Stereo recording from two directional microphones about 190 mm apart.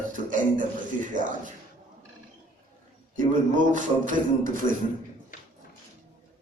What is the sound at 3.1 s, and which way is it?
Speech, 45° right (ahead or behind).